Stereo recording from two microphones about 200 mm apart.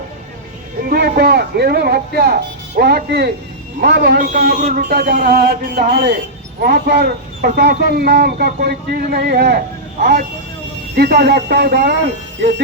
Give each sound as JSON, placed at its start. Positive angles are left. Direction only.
{"t": 0.9, "sound": "speech", "side_deg": -50}
{"t": 10.9, "sound": "speech", "side_deg": -50}